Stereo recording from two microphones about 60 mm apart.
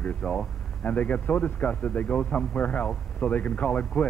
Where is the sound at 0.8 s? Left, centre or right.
Left.